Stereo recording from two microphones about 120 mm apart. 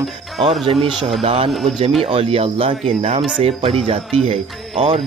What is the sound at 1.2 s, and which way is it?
Speech, 55° right (ahead or behind).